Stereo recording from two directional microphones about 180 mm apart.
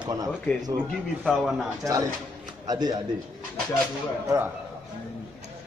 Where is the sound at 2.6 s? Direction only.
20° right (ahead or behind).